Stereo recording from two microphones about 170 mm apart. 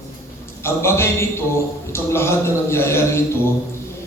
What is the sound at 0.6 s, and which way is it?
A man's voice, 15° left (ahead or behind).